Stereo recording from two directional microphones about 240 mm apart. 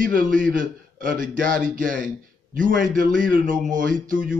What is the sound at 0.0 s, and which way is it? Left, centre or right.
A man's voice, right.